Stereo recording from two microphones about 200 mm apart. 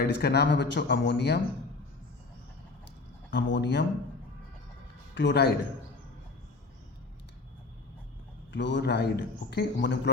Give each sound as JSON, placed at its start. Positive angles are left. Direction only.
{"t": 0.0, "sound": "a man's voice", "side_deg": 55}
{"t": 3.3, "sound": "a man's voice", "side_deg": 60}
{"t": 5.1, "sound": "a man's voice", "side_deg": 60}
{"t": 8.5, "sound": "a man's voice", "side_deg": 60}